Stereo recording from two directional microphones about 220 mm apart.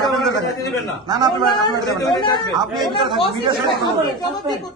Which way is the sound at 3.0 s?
20° right (ahead or behind).